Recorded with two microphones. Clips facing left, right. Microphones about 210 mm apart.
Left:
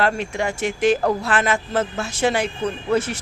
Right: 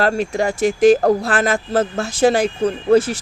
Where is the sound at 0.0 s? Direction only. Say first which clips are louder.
Right 4 dB; 40° right (ahead or behind).